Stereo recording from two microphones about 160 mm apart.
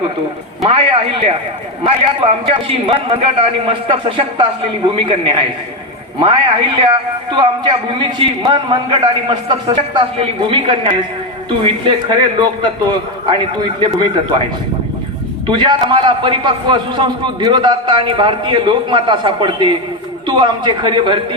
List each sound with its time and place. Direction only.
0.6 s a man's voice: 35° right (ahead or behind)
2.5 s a man's voice: 35° right (ahead or behind)
15.4 s a man's voice: 30° right (ahead or behind)